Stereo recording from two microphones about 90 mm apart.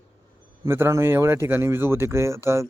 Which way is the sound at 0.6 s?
30° right (ahead or behind).